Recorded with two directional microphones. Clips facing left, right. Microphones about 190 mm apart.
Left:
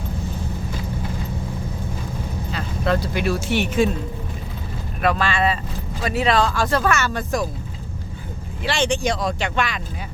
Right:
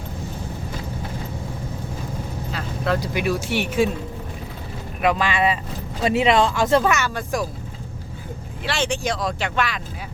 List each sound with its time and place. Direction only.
2.5 s vehicle: 5° right (ahead or behind)
3.0 s speech: 15° right (ahead or behind)
4.9 s speech: 15° right (ahead or behind)
8.6 s speech: 5° right (ahead or behind)